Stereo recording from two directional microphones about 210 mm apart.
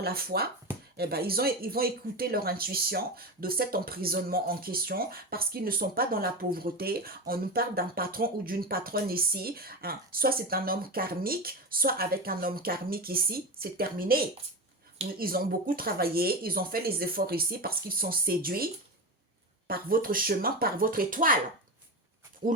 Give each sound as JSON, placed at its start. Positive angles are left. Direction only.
{"t": 0.0, "sound": "speech", "side_deg": -45}
{"t": 15.2, "sound": "speech", "side_deg": -45}
{"t": 22.4, "sound": "speech", "side_deg": -40}